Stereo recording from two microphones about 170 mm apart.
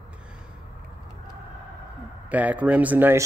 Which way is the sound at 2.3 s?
10° right (ahead or behind).